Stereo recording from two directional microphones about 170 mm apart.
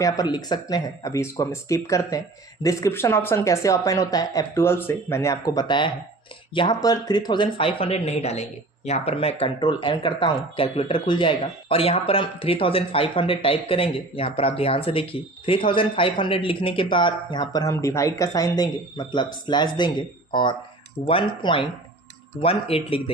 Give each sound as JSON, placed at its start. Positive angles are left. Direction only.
{"t": 0.0, "sound": "a woman's voice", "side_deg": 25}